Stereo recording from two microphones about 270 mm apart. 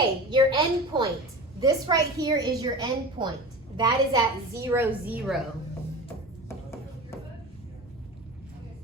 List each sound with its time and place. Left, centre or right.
0.3 s a woman's voice: centre